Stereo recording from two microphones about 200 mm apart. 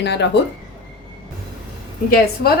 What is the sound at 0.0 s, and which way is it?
Speech, 60° left (ahead or behind).